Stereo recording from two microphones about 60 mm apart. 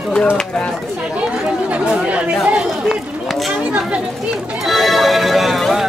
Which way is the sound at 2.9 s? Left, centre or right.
Centre.